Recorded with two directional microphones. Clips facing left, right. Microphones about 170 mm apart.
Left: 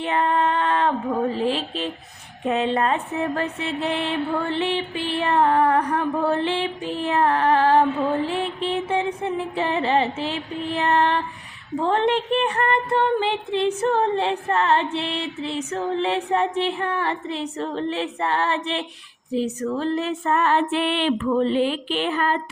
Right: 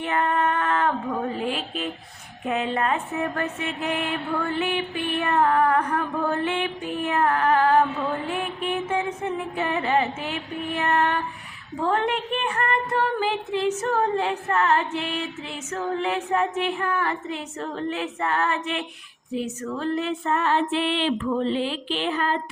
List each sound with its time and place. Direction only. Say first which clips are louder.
0.0 s female singing: left 2 dB; 25° left (ahead or behind)
1.4 s music: left 4 dB; 30° left (ahead or behind)
11.8 s a sound: left 3 dB; 30° left (ahead or behind); by 21.1 s 60° left (ahead or behind)
21.5 s music: left 4 dB; 55° left (ahead or behind)